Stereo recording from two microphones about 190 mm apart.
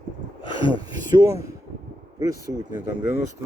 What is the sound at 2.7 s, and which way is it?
Speech, 10° right (ahead or behind).